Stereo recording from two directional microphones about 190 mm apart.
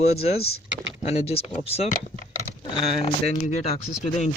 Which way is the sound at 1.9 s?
45° left (ahead or behind).